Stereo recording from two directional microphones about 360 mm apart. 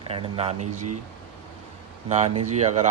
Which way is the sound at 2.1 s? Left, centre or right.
Centre.